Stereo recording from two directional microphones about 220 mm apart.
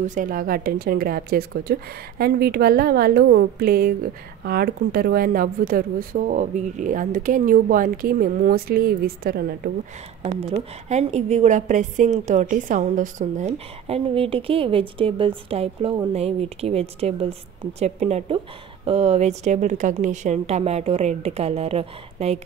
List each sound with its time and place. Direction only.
0.0 s speech: 35° right (ahead or behind)
10.2 s a woman's voice: 25° right (ahead or behind)